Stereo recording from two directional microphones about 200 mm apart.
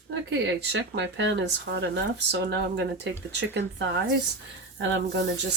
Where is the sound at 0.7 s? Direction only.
65° right (ahead or behind).